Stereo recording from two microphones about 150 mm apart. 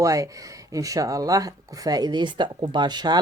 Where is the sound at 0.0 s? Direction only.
20° right (ahead or behind).